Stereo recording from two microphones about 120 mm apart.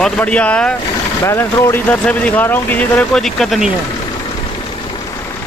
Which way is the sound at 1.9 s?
10° left (ahead or behind).